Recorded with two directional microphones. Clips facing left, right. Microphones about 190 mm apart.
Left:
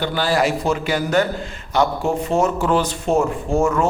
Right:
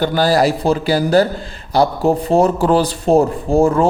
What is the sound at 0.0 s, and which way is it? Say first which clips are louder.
A man's voice: right 5 dB; 40° right (ahead or behind).